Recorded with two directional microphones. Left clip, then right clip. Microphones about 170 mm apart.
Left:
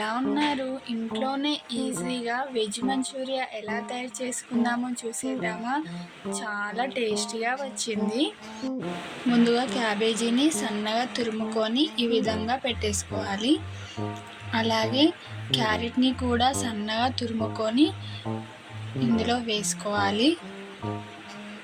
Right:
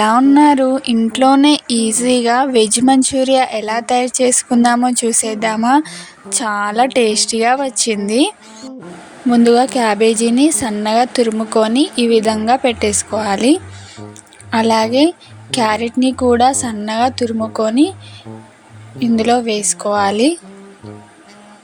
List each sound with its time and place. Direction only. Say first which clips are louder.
0.0 s a woman's voice: right 17 dB; 90° right; by 8.3 s 65° right (ahead or behind)
9.3 s a woman's voice: right 13 dB; 55° right (ahead or behind)
18.9 s a woman's voice: right 12 dB; 50° right (ahead or behind)